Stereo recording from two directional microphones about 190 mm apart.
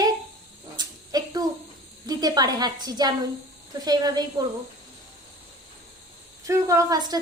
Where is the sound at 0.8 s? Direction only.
20° right (ahead or behind).